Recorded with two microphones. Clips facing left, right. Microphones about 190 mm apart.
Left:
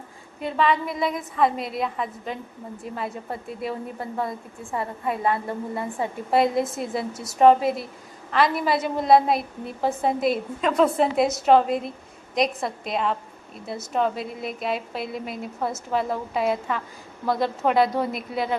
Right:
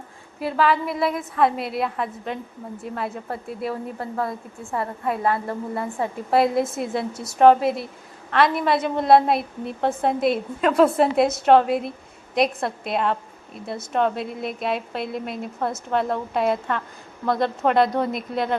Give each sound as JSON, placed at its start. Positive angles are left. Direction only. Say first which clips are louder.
{"t": 0.3, "sound": "a woman's voice", "louder": "right 2 dB", "side_deg": -5}
{"t": 4.8, "sound": "a woman's voice", "louder": "right 2 dB", "side_deg": 0}
{"t": 5.5, "sound": "a woman's voice", "louder": "right 1 dB", "side_deg": 25}
{"t": 6.0, "sound": "a woman's voice", "louder": "right 1 dB", "side_deg": 0}